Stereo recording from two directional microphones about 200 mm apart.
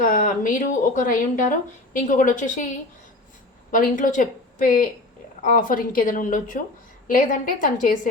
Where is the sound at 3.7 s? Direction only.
40° left (ahead or behind).